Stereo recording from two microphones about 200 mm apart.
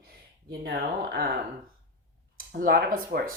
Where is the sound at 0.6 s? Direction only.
55° right (ahead or behind).